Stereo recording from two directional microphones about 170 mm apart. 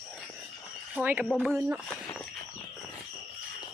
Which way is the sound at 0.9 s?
10° right (ahead or behind).